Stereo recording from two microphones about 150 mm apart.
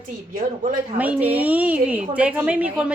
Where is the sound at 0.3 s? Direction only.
65° right (ahead or behind).